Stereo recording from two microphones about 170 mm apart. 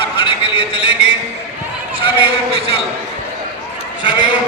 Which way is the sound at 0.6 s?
10° right (ahead or behind).